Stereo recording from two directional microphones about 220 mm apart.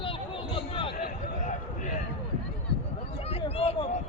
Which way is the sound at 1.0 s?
35° left (ahead or behind).